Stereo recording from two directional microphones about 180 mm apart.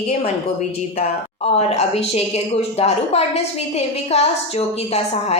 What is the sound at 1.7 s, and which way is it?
A woman's voice, 35° left (ahead or behind).